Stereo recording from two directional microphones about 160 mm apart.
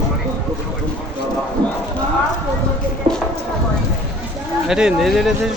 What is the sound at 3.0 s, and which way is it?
Music, 35° right (ahead or behind).